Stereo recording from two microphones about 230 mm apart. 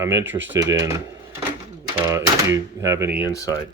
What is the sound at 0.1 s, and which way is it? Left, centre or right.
Speech, right.